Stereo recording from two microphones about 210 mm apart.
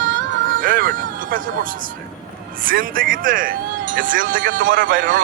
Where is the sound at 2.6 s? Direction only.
40° right (ahead or behind).